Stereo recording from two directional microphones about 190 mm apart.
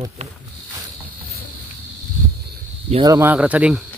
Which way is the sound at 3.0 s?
15° right (ahead or behind).